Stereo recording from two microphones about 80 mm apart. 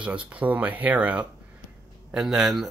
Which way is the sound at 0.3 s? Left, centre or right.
Centre.